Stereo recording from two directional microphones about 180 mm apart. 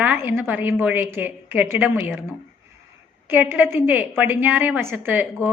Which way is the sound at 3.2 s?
10° right (ahead or behind).